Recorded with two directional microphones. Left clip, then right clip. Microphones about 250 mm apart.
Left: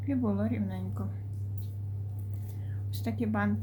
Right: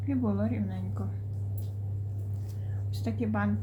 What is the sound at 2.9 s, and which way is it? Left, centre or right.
Speech, centre.